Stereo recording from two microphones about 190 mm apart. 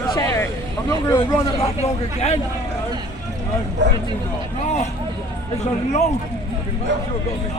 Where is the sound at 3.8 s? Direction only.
70° right (ahead or behind).